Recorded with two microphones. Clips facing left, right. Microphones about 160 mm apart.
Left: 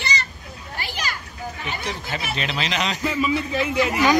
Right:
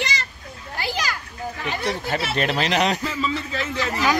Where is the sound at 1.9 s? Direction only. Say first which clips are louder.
Right 6 dB; 45° right (ahead or behind).